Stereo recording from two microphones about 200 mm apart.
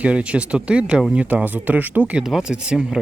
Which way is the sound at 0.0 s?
5° right (ahead or behind).